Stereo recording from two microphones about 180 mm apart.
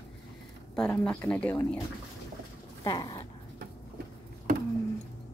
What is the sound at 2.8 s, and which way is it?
Speech, 25° left (ahead or behind).